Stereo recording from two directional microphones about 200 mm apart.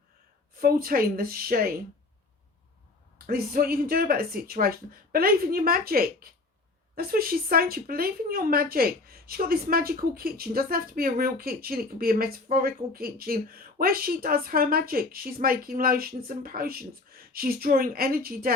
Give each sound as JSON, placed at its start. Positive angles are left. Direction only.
{"t": 0.6, "sound": "speech", "side_deg": -45}
{"t": 3.2, "sound": "speech", "side_deg": -50}